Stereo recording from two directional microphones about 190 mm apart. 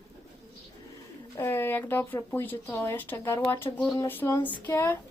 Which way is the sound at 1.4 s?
15° left (ahead or behind).